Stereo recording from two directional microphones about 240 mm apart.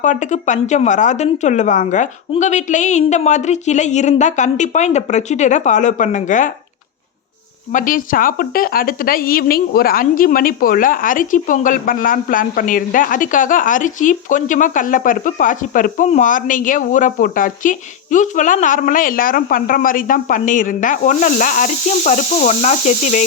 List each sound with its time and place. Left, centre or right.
0.0 s a woman's voice: left
7.7 s speech: left